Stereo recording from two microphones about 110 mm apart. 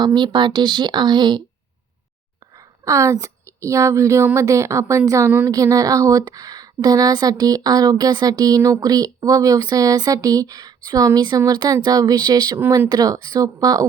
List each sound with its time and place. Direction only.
0.0 s speech: 45° right (ahead or behind)
2.8 s a woman's voice: 30° right (ahead or behind)
12.5 s speech: 25° right (ahead or behind)
12.9 s a woman's voice: 35° right (ahead or behind)